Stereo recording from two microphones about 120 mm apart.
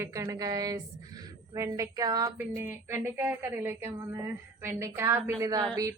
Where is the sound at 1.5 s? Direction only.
25° right (ahead or behind).